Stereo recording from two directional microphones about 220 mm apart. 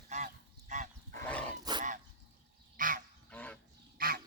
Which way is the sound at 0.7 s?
35° right (ahead or behind).